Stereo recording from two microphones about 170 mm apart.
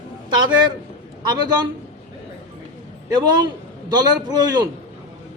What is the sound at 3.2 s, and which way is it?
A man's voice, 25° right (ahead or behind).